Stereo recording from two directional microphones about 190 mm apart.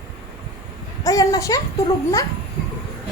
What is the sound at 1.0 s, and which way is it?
Speech, 20° left (ahead or behind).